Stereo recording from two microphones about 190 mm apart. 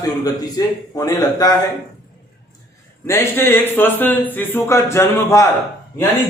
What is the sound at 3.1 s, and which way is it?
A man's voice, 10° left (ahead or behind).